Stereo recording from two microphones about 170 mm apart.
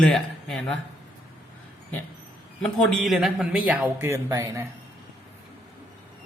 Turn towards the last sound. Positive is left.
turn(degrees=-20)  # may be behind; listen again after turning